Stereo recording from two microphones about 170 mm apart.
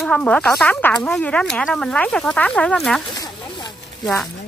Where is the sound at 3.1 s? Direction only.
20° left (ahead or behind).